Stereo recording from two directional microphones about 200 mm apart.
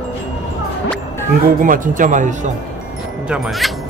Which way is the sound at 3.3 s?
Centre (ahead or behind).